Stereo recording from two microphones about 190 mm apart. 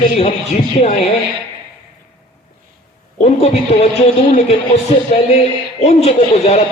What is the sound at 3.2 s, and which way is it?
Speech, 35° left (ahead or behind).